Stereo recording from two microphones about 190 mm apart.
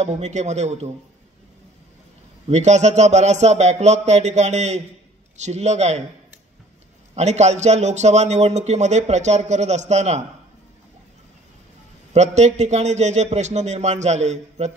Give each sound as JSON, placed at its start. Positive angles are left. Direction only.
{"t": 0.0, "sound": "a man's voice", "side_deg": -35}
{"t": 2.4, "sound": "a man's voice", "side_deg": -35}
{"t": 7.2, "sound": "a man's voice", "side_deg": -35}
{"t": 12.1, "sound": "a man's voice", "side_deg": -35}